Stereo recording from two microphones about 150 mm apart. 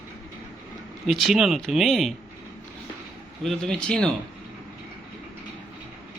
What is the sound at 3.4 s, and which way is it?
Speech, 5° left (ahead or behind).